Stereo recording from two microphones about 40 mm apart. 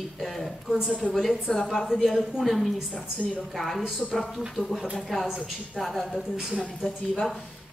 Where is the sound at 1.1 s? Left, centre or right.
Centre.